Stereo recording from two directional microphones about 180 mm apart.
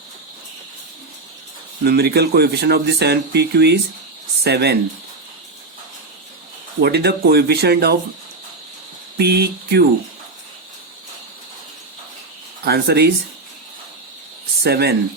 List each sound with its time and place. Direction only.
1.8 s speech: 60° right (ahead or behind)
6.8 s speech: 65° right (ahead or behind)
9.1 s speech: 60° right (ahead or behind)
12.6 s speech: 60° right (ahead or behind)
14.6 s speech: 60° right (ahead or behind)